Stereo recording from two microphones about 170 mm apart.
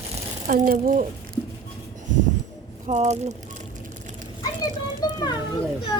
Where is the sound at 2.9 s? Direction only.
45° right (ahead or behind).